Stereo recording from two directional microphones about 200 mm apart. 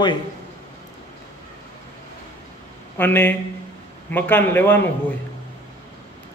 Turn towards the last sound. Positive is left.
turn(degrees=10)  # may be behind; listen again after turning